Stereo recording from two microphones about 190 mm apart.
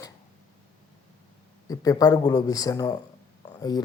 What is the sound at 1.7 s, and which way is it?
Speech, 20° left (ahead or behind).